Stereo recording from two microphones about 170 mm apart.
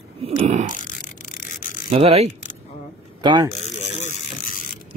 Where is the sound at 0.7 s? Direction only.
50° left (ahead or behind).